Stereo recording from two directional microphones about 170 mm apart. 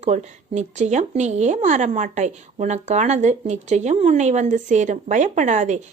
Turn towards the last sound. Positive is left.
turn(degrees=-45)  # may be behind; listen again after turning